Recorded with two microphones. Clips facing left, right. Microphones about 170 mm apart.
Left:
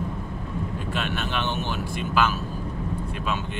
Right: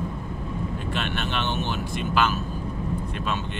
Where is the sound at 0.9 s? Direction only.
5° left (ahead or behind).